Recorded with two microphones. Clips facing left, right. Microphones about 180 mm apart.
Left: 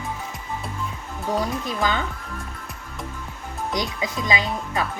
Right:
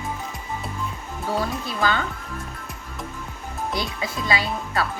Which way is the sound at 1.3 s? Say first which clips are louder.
Left 1 dB; 15° left (ahead or behind).